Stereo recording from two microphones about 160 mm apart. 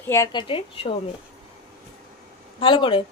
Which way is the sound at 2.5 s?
30° left (ahead or behind).